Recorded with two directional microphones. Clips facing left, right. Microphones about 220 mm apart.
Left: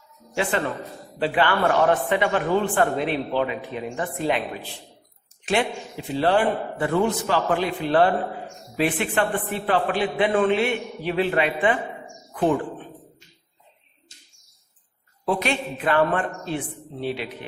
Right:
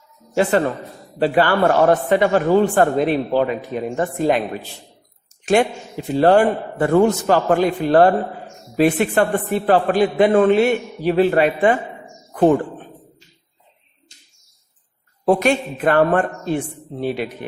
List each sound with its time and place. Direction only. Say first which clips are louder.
0.3 s a man's voice: right 7 dB; 40° right (ahead or behind)
15.3 s a man's voice: right 8 dB; 45° right (ahead or behind)